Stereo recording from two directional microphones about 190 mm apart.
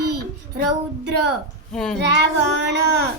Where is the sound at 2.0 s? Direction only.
65° right (ahead or behind).